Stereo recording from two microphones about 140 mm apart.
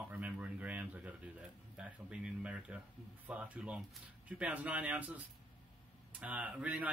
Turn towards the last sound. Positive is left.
turn(degrees=-10)  # may be behind; listen again after turning